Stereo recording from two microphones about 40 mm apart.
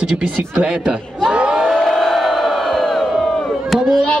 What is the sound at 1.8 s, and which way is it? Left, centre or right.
Crowd, centre.